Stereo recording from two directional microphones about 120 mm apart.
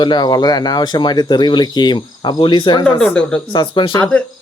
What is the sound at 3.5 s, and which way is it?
Speech, 45° left (ahead or behind).